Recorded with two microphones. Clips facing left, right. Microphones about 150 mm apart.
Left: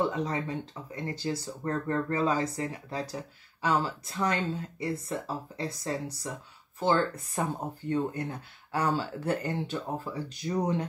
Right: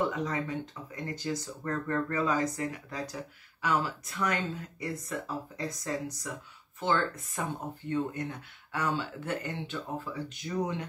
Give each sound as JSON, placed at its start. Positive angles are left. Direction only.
{"t": 0.0, "sound": "speech", "side_deg": 30}